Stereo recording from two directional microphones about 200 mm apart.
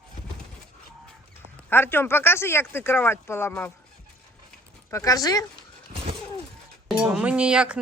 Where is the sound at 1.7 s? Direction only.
10° left (ahead or behind).